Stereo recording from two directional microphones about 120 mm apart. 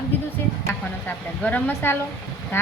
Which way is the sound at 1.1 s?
15° left (ahead or behind).